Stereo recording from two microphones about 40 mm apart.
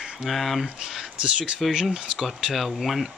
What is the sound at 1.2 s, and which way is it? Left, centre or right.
Speech, right.